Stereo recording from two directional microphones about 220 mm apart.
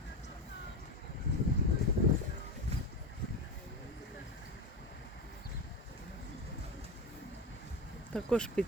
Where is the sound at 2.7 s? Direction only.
30° right (ahead or behind).